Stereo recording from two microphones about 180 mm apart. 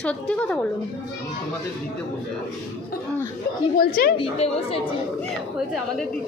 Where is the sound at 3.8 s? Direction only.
55° left (ahead or behind).